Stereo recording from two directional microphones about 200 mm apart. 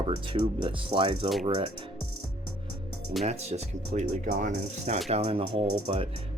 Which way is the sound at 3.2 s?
30° right (ahead or behind).